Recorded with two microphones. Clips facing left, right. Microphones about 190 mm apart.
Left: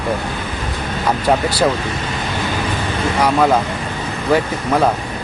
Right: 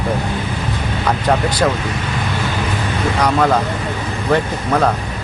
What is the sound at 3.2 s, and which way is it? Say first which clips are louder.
Speech: left 1 dB; 5° left (ahead or behind).